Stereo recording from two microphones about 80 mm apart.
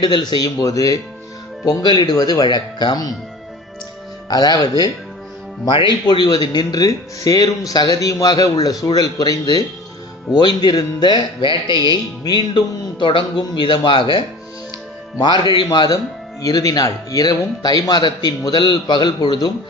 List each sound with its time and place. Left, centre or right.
0.0 s a man's voice: left
1.6 s a man's voice: left
4.3 s a man's voice: left
5.6 s a man's voice: left
11.9 s speech: left
15.2 s a man's voice: left
16.4 s a man's voice: left